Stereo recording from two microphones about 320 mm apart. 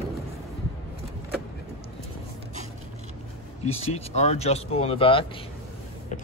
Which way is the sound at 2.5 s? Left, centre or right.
Right.